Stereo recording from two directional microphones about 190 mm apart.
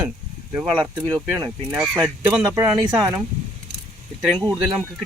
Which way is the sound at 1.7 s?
Centre (ahead or behind).